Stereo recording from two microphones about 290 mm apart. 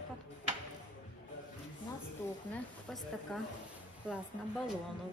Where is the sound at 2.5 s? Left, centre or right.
Centre.